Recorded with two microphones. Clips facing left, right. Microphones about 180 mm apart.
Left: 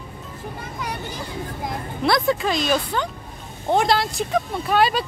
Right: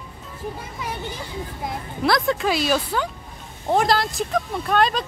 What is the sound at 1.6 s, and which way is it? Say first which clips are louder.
Speech: right 1 dB; centre (ahead or behind).